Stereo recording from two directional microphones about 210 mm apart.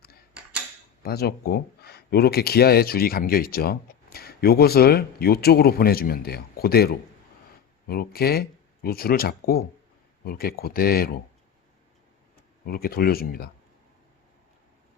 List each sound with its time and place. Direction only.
1.0 s speech: 50° left (ahead or behind)
12.6 s speech: 45° left (ahead or behind)